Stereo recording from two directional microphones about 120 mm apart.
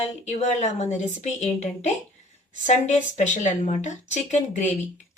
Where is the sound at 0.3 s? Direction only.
75° left (ahead or behind).